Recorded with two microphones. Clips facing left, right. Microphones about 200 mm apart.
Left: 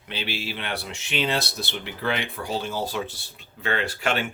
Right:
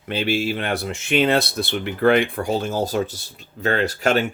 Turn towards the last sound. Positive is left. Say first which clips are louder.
# right 6 dB
turn(degrees=-40)  # may be behind; listen again after turning